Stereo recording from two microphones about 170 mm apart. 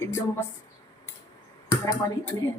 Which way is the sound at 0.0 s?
15° left (ahead or behind).